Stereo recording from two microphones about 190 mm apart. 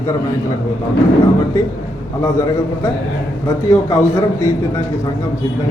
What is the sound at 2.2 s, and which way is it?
Speech, 15° left (ahead or behind).